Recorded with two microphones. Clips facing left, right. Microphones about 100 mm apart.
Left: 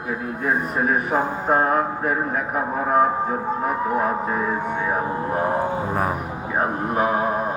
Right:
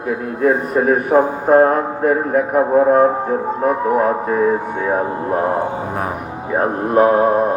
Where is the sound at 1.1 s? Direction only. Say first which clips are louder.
Right 11 dB; 50° right (ahead or behind).